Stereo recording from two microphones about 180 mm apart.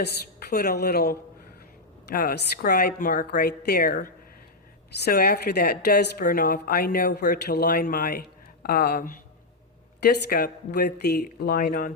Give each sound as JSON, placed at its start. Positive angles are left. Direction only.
{"t": 0.0, "sound": "a woman's voice", "side_deg": 60}
{"t": 2.1, "sound": "a woman's voice", "side_deg": 55}